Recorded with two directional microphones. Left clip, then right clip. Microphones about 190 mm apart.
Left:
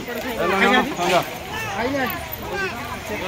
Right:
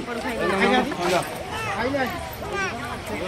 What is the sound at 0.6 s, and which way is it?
Speech, 45° left (ahead or behind).